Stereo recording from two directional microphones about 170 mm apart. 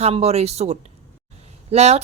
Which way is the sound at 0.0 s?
40° right (ahead or behind).